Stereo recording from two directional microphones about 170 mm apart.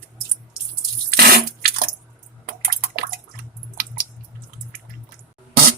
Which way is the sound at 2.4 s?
60° right (ahead or behind).